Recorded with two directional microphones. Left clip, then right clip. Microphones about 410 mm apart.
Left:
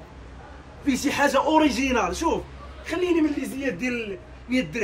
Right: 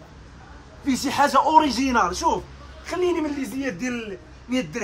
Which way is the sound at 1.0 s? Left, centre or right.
Centre.